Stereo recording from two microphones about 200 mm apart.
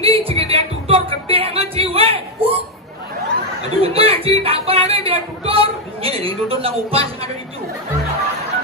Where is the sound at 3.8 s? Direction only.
30° right (ahead or behind).